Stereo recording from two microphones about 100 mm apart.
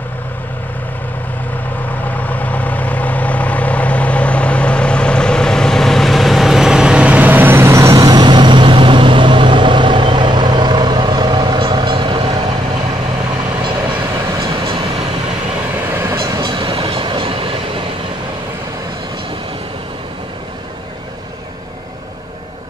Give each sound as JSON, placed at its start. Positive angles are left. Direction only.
{"t": 2.0, "sound": "vehicle", "side_deg": 15}
{"t": 15.9, "sound": "train", "side_deg": -25}
{"t": 16.3, "sound": "train", "side_deg": -50}